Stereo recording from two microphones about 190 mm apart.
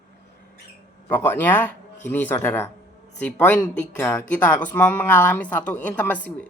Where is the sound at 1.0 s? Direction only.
10° left (ahead or behind).